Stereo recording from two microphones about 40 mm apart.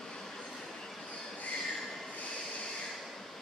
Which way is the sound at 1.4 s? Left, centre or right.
Left.